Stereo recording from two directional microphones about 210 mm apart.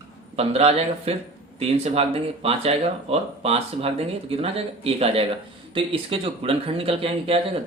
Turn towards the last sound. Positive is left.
turn(degrees=-25)  # may be behind; listen again after turning